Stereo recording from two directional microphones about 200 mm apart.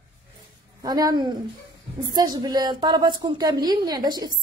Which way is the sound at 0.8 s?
20° right (ahead or behind).